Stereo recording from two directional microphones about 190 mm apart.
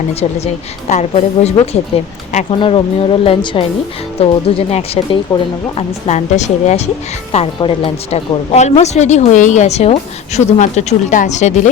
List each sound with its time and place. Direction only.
0.1 s a woman's voice: 35° left (ahead or behind)
2.6 s a woman's voice: 25° left (ahead or behind)
7.3 s a woman's voice: 25° left (ahead or behind)